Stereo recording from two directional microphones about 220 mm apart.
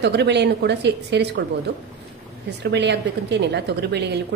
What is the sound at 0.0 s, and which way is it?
A woman's voice, 50° right (ahead or behind).